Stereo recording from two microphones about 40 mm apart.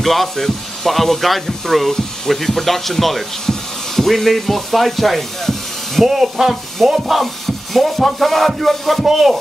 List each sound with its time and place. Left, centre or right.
0.0 s speech: centre
3.4 s a sound: centre
6.0 s speech: centre